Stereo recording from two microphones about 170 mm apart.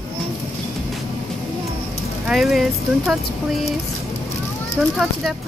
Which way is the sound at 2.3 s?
Centre (ahead or behind).